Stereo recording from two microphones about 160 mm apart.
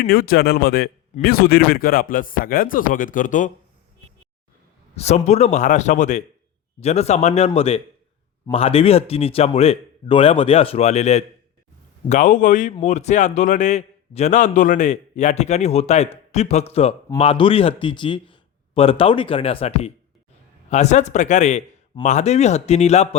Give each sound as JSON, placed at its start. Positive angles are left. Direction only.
{"t": 0.0, "sound": "speech", "side_deg": 70}
{"t": 4.9, "sound": "a man's voice", "side_deg": 45}